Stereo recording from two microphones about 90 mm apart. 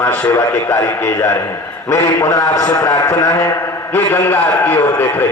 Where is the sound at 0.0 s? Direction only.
20° left (ahead or behind); by 3.4 s 40° left (ahead or behind).